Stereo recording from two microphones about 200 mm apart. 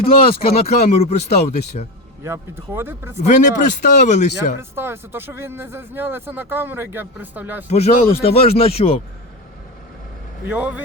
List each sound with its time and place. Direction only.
0.0 s speech: 30° left (ahead or behind)
2.2 s speech: 10° right (ahead or behind)
3.2 s speech: 35° left (ahead or behind)
4.7 s speech: 10° right (ahead or behind)
7.7 s speech: 30° left (ahead or behind)
10.4 s speech: 5° right (ahead or behind)